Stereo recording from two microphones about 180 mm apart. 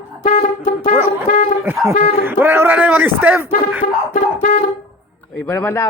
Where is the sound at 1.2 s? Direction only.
45° left (ahead or behind).